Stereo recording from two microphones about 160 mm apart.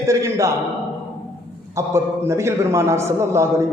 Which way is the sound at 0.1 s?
20° right (ahead or behind).